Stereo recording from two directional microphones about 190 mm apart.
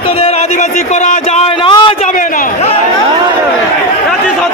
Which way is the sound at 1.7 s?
25° left (ahead or behind).